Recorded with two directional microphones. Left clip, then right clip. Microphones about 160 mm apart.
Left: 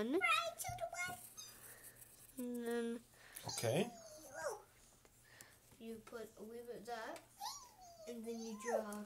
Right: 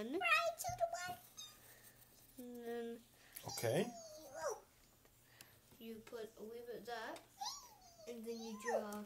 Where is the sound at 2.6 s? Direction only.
55° left (ahead or behind).